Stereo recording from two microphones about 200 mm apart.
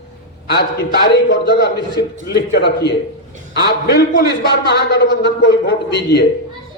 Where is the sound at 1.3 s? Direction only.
55° left (ahead or behind).